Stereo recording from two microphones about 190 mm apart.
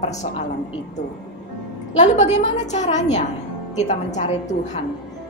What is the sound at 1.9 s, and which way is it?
A woman's voice, 35° left (ahead or behind).